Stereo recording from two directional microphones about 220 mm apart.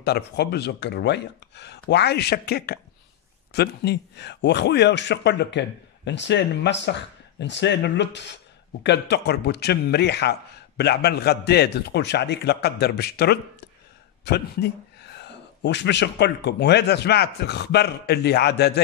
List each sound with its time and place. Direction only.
0.0 s a man's voice: 50° left (ahead or behind)